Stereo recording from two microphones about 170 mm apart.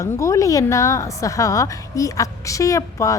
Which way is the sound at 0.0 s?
20° left (ahead or behind).